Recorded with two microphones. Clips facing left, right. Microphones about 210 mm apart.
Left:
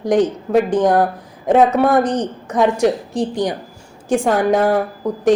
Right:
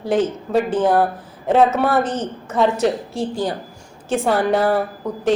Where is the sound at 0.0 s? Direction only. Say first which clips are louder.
Left 3 dB; 15° left (ahead or behind).